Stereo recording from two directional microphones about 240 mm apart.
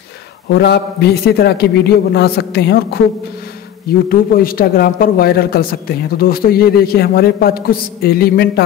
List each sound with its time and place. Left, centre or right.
0.5 s a man's voice: left
4.1 s a man's voice: left